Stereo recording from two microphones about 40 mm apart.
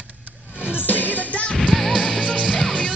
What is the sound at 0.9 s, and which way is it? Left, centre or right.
Music, left.